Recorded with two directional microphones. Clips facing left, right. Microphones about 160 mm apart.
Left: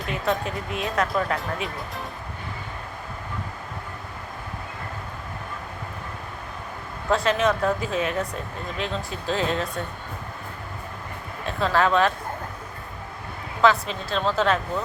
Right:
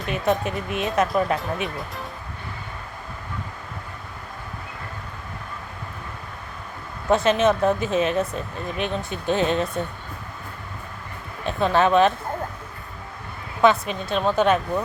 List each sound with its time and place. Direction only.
0.1 s speech: 20° right (ahead or behind)
7.1 s speech: 20° right (ahead or behind)
9.3 s speech: 20° right (ahead or behind)
11.4 s speech: 20° right (ahead or behind)
13.6 s speech: 20° right (ahead or behind)